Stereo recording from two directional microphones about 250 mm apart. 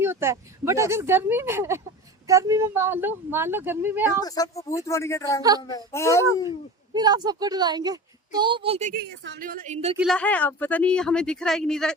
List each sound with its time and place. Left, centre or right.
0.0 s a woman's voice: centre
4.2 s speech: centre
5.4 s a woman's voice: centre
5.6 s speech: centre
6.9 s a woman's voice: centre
10.0 s speech: centre